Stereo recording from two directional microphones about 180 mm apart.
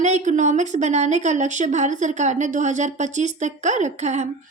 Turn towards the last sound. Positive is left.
turn(degrees=-40)  # may be behind; listen again after turning